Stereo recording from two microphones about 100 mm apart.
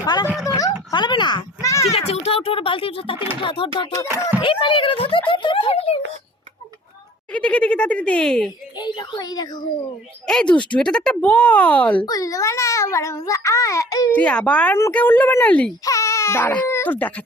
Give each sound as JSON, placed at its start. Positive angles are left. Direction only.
{"t": 0.0, "sound": "a sound", "side_deg": 45}
{"t": 0.9, "sound": "a sound", "side_deg": 50}
{"t": 1.6, "sound": "a sound", "side_deg": 30}
{"t": 1.9, "sound": "speech", "side_deg": 90}
{"t": 4.1, "sound": "speech", "side_deg": -15}
{"t": 4.6, "sound": "speech", "side_deg": 60}
{"t": 7.3, "sound": "speech", "side_deg": 10}
{"t": 8.8, "sound": "a woman's voice", "side_deg": 40}
{"t": 10.2, "sound": "speech", "side_deg": 5}
{"t": 12.0, "sound": "a child's voice", "side_deg": 35}
{"t": 14.1, "sound": "speech", "side_deg": 10}
{"t": 15.8, "sound": "speech", "side_deg": 35}